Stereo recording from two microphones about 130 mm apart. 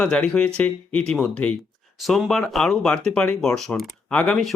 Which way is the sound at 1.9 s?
Centre (ahead or behind).